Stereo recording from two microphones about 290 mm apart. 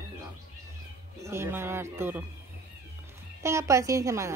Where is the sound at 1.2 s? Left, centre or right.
Centre.